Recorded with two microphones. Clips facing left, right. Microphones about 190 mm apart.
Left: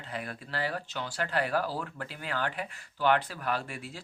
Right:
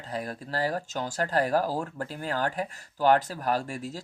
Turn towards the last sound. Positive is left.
turn(degrees=-40)  # may be behind; listen again after turning